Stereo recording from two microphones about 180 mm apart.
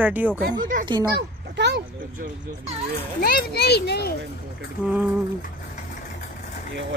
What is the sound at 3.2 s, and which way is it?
Speech, 60° left (ahead or behind).